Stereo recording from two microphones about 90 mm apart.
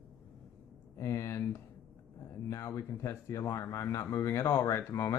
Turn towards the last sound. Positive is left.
turn(degrees=35)  # may be behind; listen again after turning